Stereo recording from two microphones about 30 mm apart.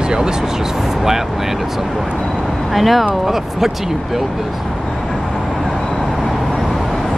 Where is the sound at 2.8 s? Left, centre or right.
Centre.